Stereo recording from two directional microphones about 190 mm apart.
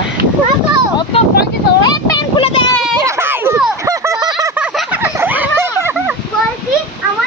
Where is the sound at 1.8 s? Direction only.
20° left (ahead or behind).